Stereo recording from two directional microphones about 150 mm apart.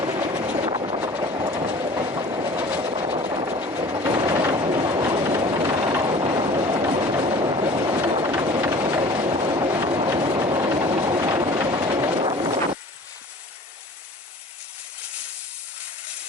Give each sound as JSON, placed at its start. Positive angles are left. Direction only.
{"t": 0.0, "sound": "vehicle", "side_deg": -25}
{"t": 0.7, "sound": "train", "side_deg": -35}
{"t": 2.6, "sound": "train", "side_deg": -10}
{"t": 2.8, "sound": "vehicle", "side_deg": -30}
{"t": 3.7, "sound": "train", "side_deg": -25}
{"t": 8.3, "sound": "vehicle", "side_deg": -25}
{"t": 9.0, "sound": "train", "side_deg": -30}
{"t": 10.1, "sound": "train", "side_deg": -30}